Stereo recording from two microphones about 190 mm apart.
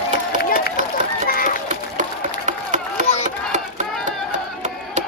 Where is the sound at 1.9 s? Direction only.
40° right (ahead or behind).